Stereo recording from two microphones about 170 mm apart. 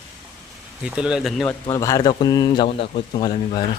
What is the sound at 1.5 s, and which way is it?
Speech, 20° left (ahead or behind).